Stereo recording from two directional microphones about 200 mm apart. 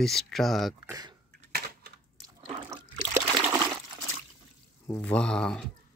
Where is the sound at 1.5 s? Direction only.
50° right (ahead or behind).